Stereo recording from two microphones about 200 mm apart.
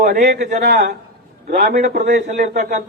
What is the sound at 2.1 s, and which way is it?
Speech, 35° right (ahead or behind).